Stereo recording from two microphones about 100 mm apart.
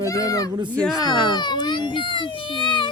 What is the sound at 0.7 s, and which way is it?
Speech, 5° left (ahead or behind).